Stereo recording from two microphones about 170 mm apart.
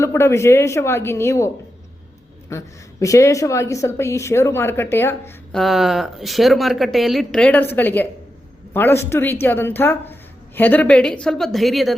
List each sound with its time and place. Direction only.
0.0 s speech: 15° left (ahead or behind)
2.5 s speech: 20° left (ahead or behind)
5.5 s speech: centre (ahead or behind)